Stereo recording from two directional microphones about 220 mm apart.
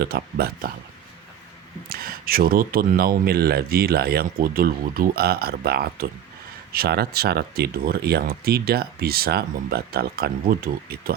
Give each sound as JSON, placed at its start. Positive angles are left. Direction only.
{"t": 0.0, "sound": "speech", "side_deg": -45}
{"t": 1.9, "sound": "speech", "side_deg": -40}